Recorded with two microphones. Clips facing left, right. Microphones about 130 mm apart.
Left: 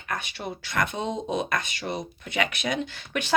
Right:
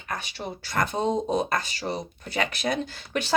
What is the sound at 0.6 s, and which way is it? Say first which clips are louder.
Speech: right 3 dB; 35° right (ahead or behind).